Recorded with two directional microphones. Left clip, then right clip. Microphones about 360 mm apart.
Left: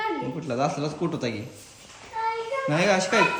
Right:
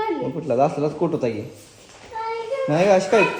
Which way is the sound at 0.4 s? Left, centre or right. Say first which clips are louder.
Right 8 dB; centre.